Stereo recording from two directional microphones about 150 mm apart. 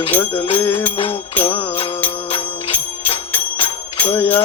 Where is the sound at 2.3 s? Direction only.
40° left (ahead or behind).